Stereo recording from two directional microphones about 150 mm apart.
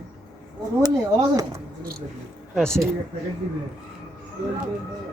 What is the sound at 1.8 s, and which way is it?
Speech, 80° right.